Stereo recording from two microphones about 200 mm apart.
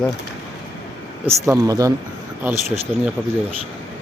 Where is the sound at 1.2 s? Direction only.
15° right (ahead or behind).